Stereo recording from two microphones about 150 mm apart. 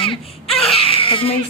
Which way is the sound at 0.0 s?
40° left (ahead or behind).